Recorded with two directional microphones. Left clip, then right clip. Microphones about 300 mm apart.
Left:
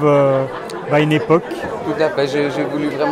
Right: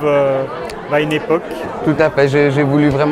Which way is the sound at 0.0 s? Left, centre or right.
Left.